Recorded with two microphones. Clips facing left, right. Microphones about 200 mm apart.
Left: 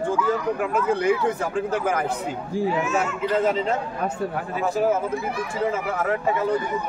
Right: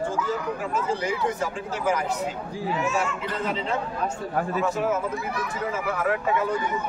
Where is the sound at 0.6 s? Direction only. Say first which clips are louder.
Left 5 dB; 60° left (ahead or behind).